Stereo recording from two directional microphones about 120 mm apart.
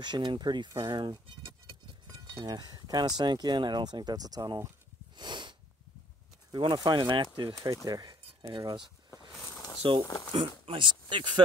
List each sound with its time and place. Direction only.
0.0 s speech: 40° right (ahead or behind)
2.4 s speech: 35° right (ahead or behind)
5.1 s sneeze: 40° right (ahead or behind)
6.5 s speech: 40° right (ahead or behind)
7.5 s speech: 30° right (ahead or behind); by 10.0 s 45° right (ahead or behind)
10.0 s speech: 30° left (ahead or behind)
10.6 s speech: 45° right (ahead or behind)